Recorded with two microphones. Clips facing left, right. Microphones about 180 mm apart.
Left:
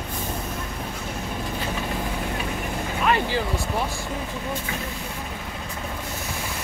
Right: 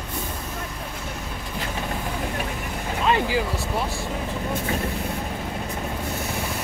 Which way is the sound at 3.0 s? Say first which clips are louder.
Right 1 dB; 20° right (ahead or behind).